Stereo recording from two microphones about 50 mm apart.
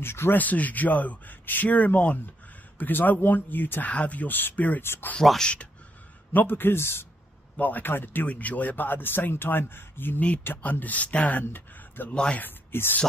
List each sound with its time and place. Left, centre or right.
0.0 s speech: left
0.4 s a man's voice: left
3.8 s a man's voice: left
5.4 s speech: left
6.3 s speech: left
7.5 s speech: left
8.3 s a man's voice: left
11.4 s a sound: left
12.4 s speech: left